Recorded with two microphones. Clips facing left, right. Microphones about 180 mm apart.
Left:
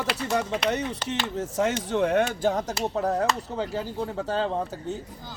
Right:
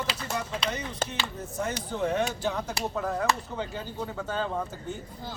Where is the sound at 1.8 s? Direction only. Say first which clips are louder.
Left 4 dB; 70° left (ahead or behind).